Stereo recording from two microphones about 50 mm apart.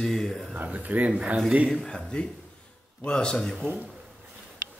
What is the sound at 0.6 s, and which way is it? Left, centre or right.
Speech, right.